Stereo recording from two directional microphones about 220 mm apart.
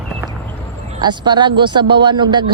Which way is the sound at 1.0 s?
20° right (ahead or behind).